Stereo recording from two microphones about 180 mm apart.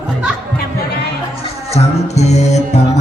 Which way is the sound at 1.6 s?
35° left (ahead or behind).